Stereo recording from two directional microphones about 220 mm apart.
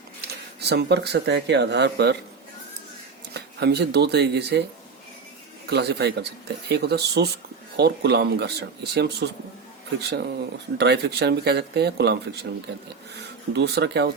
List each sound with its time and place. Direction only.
0.6 s speech: 50° right (ahead or behind)
3.3 s speech: 50° right (ahead or behind)
5.6 s speech: 50° right (ahead or behind)
10.8 s speech: 50° right (ahead or behind)
13.5 s speech: 50° right (ahead or behind)